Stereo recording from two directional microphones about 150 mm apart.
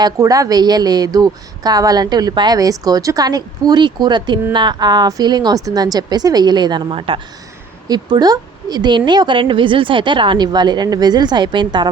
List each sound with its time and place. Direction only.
0.0 s a woman's voice: 25° right (ahead or behind)